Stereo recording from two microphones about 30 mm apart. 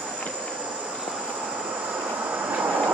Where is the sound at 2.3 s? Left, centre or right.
Right.